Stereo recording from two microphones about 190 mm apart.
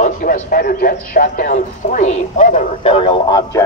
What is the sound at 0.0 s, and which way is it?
A man's voice, 45° left (ahead or behind).